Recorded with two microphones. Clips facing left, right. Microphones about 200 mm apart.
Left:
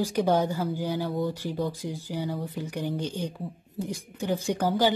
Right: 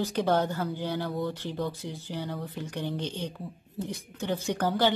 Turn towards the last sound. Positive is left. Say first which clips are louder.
# left 2 dB
turn(degrees=10)  # may be behind; listen again after turning